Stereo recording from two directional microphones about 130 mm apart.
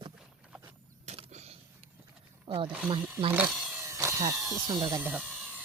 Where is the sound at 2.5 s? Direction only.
40° right (ahead or behind).